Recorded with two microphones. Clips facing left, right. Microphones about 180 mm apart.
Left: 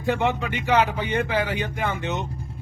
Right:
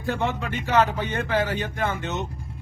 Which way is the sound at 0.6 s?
15° left (ahead or behind).